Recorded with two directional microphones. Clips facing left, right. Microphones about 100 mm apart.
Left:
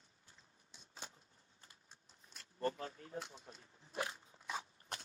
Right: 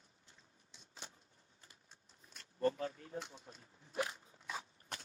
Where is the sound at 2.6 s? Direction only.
35° left (ahead or behind).